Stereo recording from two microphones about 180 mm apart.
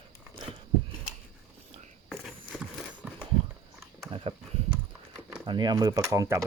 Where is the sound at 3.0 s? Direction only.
10° right (ahead or behind).